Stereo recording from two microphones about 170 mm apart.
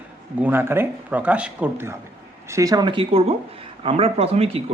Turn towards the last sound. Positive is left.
turn(degrees=-35)  # may be behind; listen again after turning